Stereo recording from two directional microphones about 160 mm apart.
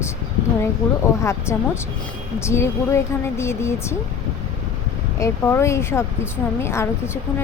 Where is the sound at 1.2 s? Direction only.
15° left (ahead or behind).